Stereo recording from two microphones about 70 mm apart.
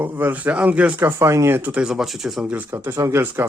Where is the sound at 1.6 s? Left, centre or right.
Right.